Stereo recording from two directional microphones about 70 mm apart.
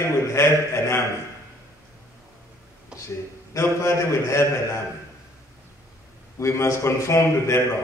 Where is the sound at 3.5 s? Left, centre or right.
Left.